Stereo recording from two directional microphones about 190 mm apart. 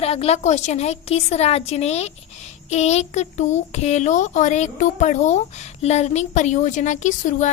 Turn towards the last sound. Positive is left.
turn(degrees=40)  # may be behind; listen again after turning